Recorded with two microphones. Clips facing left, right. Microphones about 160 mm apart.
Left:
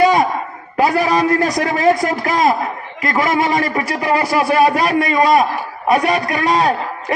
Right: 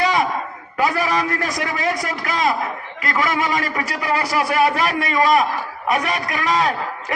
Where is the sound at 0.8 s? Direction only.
25° left (ahead or behind).